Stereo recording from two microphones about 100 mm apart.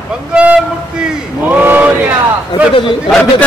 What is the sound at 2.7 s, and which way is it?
Speech, 55° left (ahead or behind).